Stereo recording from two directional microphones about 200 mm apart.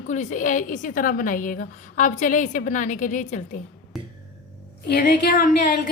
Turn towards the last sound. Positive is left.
turn(degrees=55)  # may be behind; listen again after turning